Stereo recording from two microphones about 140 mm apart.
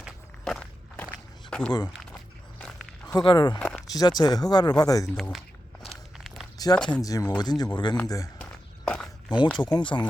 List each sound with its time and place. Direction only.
0.0 s walk: 5° left (ahead or behind)
1.5 s a sound: 5° left (ahead or behind)
2.1 s walk: 10° left (ahead or behind)
3.2 s speech: 30° left (ahead or behind)
3.6 s a sound: 5° left (ahead or behind)
3.9 s speech: 30° left (ahead or behind)
6.1 s a sound: centre (ahead or behind)
6.7 s speech: 5° left (ahead or behind)
7.0 s speech: 25° left (ahead or behind)
8.4 s walk: 5° left (ahead or behind)
9.6 s speech: 30° left (ahead or behind)